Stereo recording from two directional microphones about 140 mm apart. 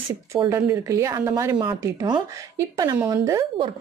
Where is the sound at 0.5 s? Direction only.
25° right (ahead or behind).